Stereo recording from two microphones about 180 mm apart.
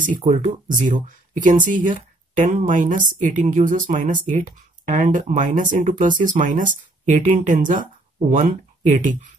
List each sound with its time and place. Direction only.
0.0 s speech: 45° right (ahead or behind)